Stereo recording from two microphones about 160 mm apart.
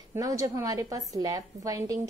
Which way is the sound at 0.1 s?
20° right (ahead or behind).